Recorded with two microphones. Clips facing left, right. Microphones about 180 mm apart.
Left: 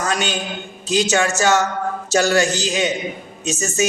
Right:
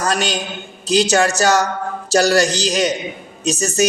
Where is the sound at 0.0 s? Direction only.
40° right (ahead or behind).